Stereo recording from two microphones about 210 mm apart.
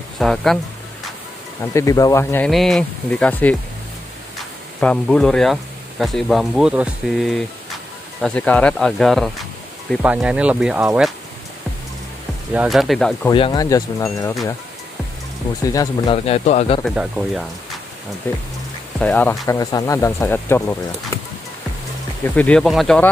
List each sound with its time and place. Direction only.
0.2 s speech: centre (ahead or behind)
1.7 s speech: 15° left (ahead or behind)
4.7 s speech: 5° left (ahead or behind)
12.5 s speech: centre (ahead or behind)
13.3 s speech: 20° left (ahead or behind)
15.7 s speech: 15° left (ahead or behind)
16.3 s speech: 30° left (ahead or behind)
16.8 s speech: centre (ahead or behind)
18.3 s speech: 10° left (ahead or behind)
22.2 s speech: 5° left (ahead or behind)